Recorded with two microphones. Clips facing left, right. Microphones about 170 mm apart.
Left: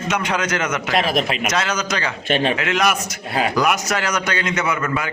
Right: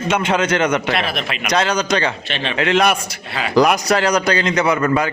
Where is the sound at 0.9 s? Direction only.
40° left (ahead or behind).